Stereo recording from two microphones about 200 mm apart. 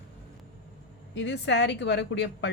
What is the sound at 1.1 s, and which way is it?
A woman's voice, 65° left (ahead or behind).